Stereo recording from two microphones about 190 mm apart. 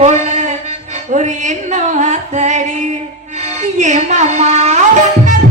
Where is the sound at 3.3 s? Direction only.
35° right (ahead or behind).